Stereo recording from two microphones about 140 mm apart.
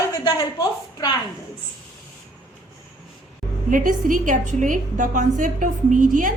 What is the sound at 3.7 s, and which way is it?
A woman's voice, 70° right (ahead or behind).